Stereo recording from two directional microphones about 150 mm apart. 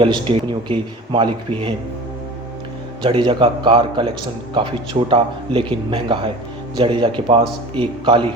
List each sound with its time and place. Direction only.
0.0 s speech: 35° right (ahead or behind)
3.0 s speech: 35° right (ahead or behind)